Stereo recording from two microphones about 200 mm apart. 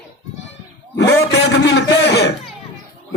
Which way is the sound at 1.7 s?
60° left (ahead or behind).